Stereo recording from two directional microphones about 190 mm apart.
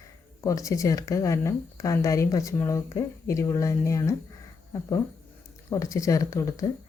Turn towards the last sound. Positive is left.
turn(degrees=15)  # may be behind; listen again after turning